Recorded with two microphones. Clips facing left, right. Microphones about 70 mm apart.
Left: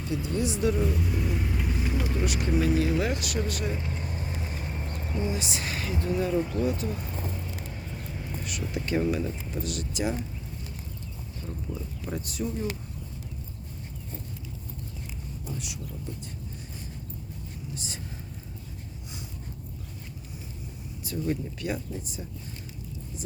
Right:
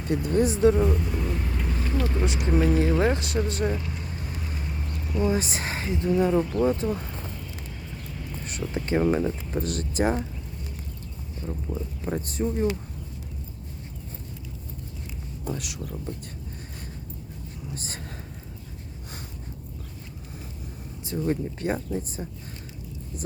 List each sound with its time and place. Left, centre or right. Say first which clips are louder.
0.3 s speech: right 7 dB; right
0.8 s vehicle: right 3 dB; centre
2.1 s speech: right 2 dB; right
3.8 s vehicle: even; left
5.3 s speech: right 5 dB; right
8.4 s speech: right 3 dB; right
11.7 s speech: right 5 dB; right
15.4 s speech: right 6 dB; right
17.7 s speech: right 1 dB; right
21.0 s speech: right 3 dB; right